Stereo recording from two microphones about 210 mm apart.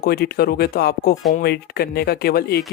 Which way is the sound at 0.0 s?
45° left (ahead or behind).